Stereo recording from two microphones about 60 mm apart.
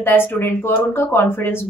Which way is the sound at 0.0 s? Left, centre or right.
Left.